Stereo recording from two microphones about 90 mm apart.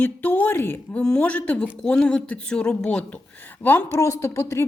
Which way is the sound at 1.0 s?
10° left (ahead or behind).